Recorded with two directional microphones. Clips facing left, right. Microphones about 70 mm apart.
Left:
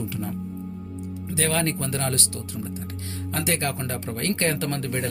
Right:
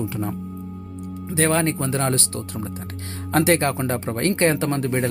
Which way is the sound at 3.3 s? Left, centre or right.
Right.